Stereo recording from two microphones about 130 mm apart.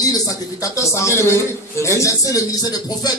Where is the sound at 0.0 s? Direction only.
25° left (ahead or behind).